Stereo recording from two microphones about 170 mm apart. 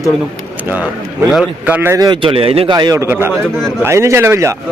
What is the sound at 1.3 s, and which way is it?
A man's voice, 5° right (ahead or behind).